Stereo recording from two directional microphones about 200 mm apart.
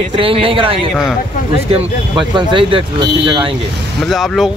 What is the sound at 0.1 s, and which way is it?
Speech, 25° right (ahead or behind).